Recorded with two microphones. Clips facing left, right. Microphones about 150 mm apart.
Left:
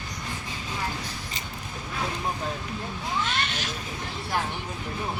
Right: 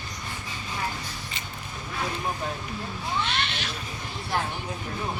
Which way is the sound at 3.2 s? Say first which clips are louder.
Even; 45° left (ahead or behind).